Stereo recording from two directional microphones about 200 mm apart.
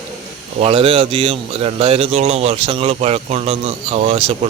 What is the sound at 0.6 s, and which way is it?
Speech, 30° right (ahead or behind).